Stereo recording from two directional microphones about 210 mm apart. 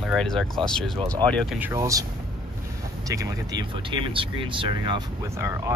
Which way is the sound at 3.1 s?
15° right (ahead or behind).